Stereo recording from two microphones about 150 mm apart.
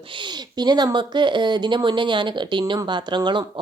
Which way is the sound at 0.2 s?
30° right (ahead or behind).